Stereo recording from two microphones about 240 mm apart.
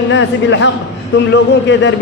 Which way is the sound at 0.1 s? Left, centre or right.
Left.